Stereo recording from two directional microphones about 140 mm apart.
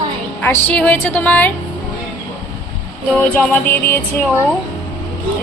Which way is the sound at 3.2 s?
10° left (ahead or behind).